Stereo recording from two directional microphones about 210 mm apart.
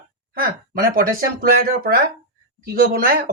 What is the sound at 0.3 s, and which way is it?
A man's voice, 45° right (ahead or behind).